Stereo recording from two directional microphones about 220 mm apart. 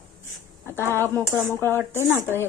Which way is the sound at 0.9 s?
10° left (ahead or behind).